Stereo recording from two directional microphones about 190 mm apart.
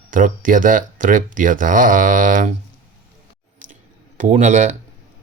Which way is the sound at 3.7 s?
40° right (ahead or behind).